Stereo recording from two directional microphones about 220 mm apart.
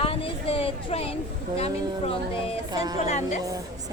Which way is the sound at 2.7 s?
20° right (ahead or behind).